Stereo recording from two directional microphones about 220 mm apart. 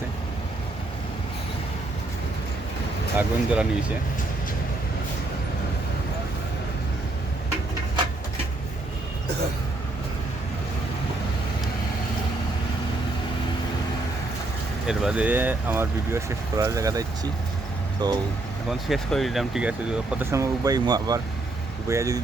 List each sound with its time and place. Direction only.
3.2 s speech: 5° right (ahead or behind)
14.8 s speech: 5° right (ahead or behind); by 18.2 s 20° right (ahead or behind)
18.7 s speech: centre (ahead or behind)